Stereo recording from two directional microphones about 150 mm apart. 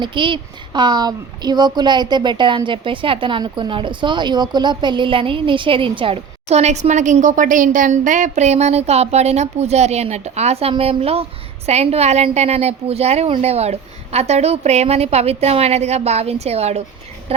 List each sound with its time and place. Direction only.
0.0 s speech: 35° right (ahead or behind)